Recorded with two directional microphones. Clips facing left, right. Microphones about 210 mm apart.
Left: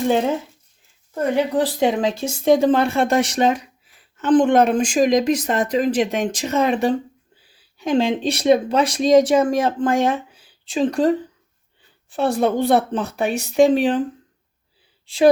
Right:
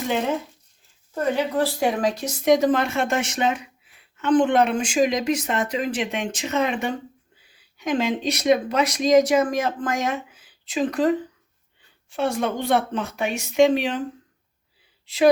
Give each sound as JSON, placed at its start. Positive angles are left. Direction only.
{"t": 1.1, "sound": "speech", "side_deg": 15}
{"t": 12.1, "sound": "speech", "side_deg": 35}
{"t": 15.0, "sound": "speech", "side_deg": 30}